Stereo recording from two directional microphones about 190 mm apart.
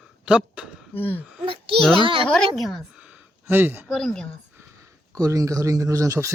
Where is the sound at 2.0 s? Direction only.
25° right (ahead or behind).